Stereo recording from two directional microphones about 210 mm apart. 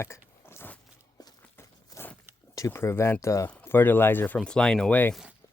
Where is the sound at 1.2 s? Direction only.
15° left (ahead or behind).